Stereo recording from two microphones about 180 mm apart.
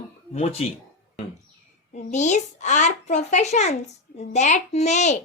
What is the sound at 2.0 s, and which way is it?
A child's voice, 40° left (ahead or behind).